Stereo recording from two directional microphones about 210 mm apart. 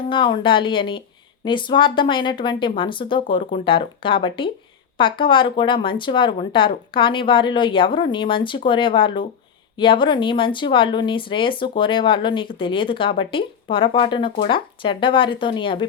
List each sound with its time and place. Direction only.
0.1 s speech: 20° left (ahead or behind)